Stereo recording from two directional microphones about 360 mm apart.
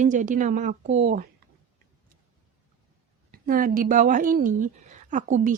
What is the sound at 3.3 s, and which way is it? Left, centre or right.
A woman's voice, right.